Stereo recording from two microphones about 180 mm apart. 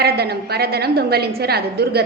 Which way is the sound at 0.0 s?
60° right (ahead or behind).